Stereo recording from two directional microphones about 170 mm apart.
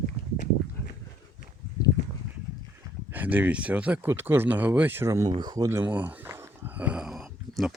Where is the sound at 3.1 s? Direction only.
10° right (ahead or behind).